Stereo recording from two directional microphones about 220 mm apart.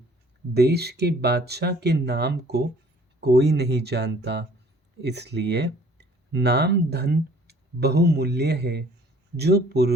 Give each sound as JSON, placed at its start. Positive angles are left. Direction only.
{"t": 0.5, "sound": "speech", "side_deg": -45}